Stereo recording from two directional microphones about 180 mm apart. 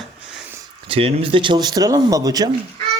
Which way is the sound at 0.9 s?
30° right (ahead or behind).